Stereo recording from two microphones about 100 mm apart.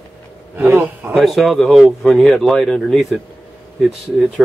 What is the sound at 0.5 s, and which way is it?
Speech, 20° right (ahead or behind).